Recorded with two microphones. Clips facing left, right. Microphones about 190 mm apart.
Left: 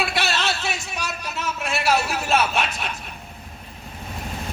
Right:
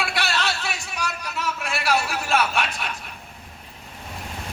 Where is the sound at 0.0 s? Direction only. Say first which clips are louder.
Left 2 dB; 25° left (ahead or behind).